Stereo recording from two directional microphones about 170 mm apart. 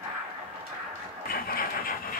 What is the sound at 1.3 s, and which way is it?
Vehicle, 60° left (ahead or behind).